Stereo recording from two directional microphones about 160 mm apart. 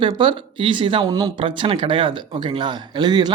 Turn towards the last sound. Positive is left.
turn(degrees=-25)  # may be behind; listen again after turning